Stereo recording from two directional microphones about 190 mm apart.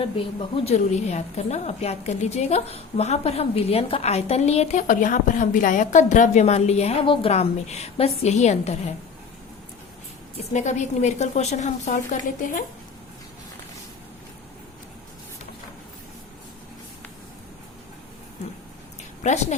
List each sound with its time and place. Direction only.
0.0 s a woman's voice: 30° left (ahead or behind)
10.5 s a woman's voice: 40° left (ahead or behind)
19.2 s a woman's voice: 40° left (ahead or behind)